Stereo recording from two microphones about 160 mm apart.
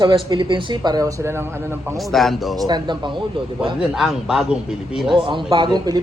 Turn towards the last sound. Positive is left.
turn(degrees=-25)  # may be behind; listen again after turning